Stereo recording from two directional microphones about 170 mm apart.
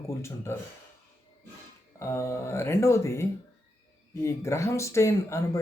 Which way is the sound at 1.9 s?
15° left (ahead or behind).